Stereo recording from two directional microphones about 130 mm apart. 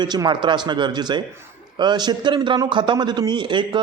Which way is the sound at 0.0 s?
35° right (ahead or behind).